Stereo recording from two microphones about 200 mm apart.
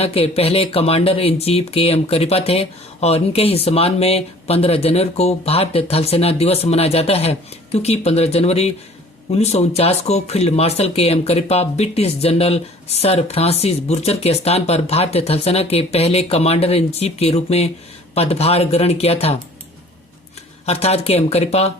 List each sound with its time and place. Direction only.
0.0 s speech: 30° left (ahead or behind)
20.7 s speech: 30° left (ahead or behind)